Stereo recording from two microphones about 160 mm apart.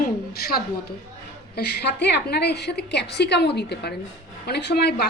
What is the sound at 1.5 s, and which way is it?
A woman's voice, 85° left.